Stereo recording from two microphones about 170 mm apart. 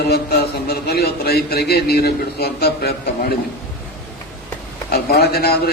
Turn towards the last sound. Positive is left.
turn(degrees=65)  # may be behind; listen again after turning